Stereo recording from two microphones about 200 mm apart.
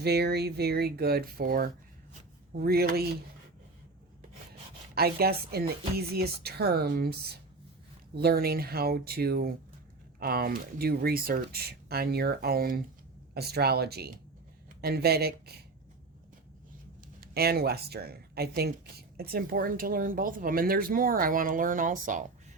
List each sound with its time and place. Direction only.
0.0 s speech: 55° right (ahead or behind)
4.9 s speech: 50° right (ahead or behind)
17.2 s speech: 50° right (ahead or behind)